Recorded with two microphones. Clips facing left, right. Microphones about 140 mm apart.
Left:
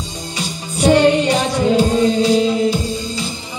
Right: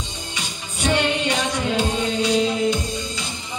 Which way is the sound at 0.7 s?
35° left (ahead or behind).